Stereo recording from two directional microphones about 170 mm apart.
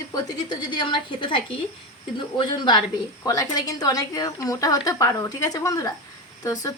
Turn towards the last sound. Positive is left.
turn(degrees=20)  # may be behind; listen again after turning